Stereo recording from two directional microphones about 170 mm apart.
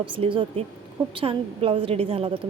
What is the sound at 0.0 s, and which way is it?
A woman's voice, 30° right (ahead or behind).